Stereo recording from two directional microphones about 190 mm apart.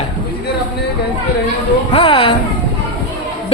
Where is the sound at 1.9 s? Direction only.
25° left (ahead or behind).